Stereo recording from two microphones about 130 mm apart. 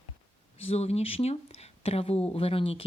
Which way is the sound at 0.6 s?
50° left (ahead or behind).